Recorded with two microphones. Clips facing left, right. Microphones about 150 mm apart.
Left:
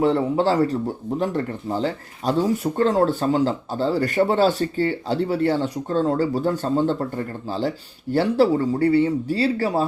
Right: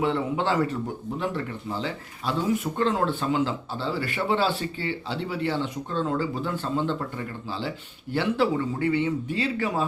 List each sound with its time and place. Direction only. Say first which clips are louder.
0.0 s speech: left 6 dB; 40° left (ahead or behind)